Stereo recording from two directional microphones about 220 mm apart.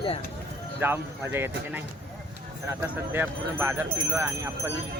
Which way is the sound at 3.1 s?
10° right (ahead or behind).